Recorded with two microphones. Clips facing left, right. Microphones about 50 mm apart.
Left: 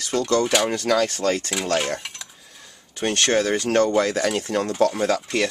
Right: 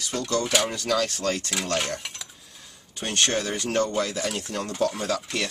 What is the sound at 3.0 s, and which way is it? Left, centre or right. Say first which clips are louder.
Speech: left 5 dB; left.